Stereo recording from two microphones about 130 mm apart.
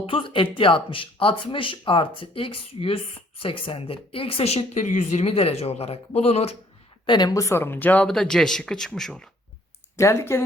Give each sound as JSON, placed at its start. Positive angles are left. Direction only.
{"t": 0.0, "sound": "speech", "side_deg": 45}
{"t": 7.0, "sound": "speech", "side_deg": 35}
{"t": 10.0, "sound": "speech", "side_deg": 20}